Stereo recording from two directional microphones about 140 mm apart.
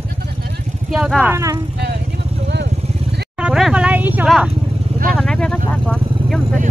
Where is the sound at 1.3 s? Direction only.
20° right (ahead or behind).